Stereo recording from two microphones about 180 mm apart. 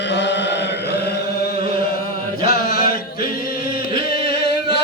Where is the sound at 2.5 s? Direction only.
55° left (ahead or behind).